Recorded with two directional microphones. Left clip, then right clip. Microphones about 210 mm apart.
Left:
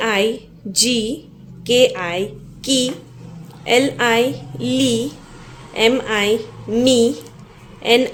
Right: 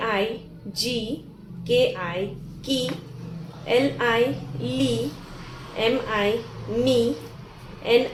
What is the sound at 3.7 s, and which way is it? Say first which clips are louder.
A woman's voice: left 6 dB; 50° left (ahead or behind).